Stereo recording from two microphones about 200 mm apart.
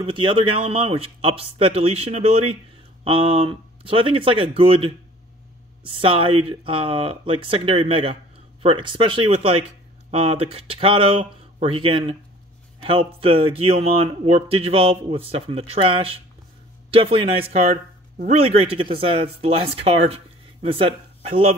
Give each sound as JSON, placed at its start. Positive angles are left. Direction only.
{"t": 0.0, "sound": "speech", "side_deg": -25}